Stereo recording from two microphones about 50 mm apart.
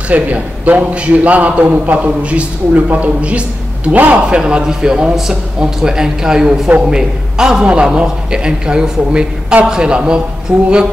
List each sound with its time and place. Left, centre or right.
0.1 s a man's voice: right
4.3 s a man's voice: centre
5.1 s a man's voice: centre